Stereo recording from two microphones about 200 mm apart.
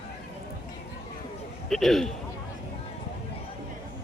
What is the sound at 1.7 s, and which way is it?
Speech, centre (ahead or behind).